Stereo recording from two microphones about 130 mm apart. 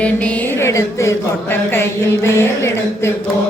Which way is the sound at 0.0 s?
10° left (ahead or behind).